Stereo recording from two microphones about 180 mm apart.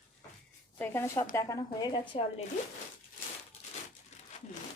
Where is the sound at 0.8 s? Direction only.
15° left (ahead or behind).